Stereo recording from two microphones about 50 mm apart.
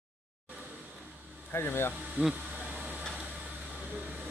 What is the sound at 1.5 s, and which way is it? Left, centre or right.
Speech, left.